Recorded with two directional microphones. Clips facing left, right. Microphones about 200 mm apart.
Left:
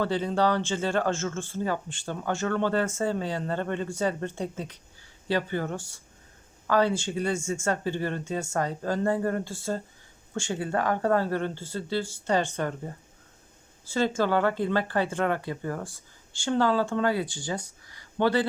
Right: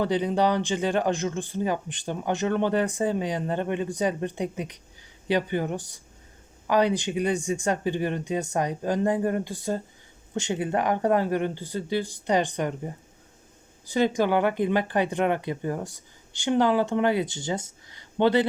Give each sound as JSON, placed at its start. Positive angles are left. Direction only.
{"t": 0.0, "sound": "speech", "side_deg": -15}